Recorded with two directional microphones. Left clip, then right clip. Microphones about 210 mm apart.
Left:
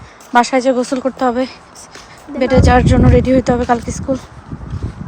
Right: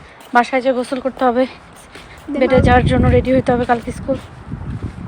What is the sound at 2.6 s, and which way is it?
Speech, 20° left (ahead or behind).